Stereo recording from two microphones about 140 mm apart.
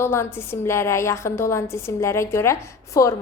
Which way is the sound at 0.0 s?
15° left (ahead or behind).